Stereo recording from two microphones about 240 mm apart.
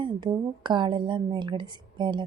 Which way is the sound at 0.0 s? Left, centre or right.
Centre.